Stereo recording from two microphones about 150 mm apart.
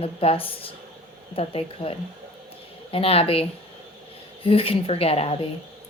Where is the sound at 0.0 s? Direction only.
40° left (ahead or behind).